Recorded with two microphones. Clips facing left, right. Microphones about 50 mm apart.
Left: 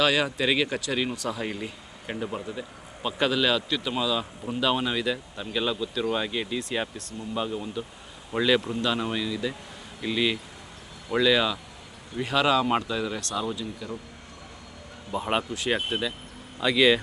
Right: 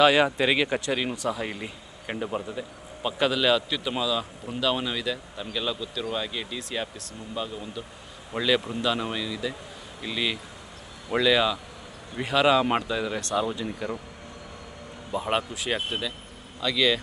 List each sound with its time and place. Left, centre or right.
0.0 s speech: centre
13.1 s speech: centre
13.7 s speech: right
15.1 s speech: centre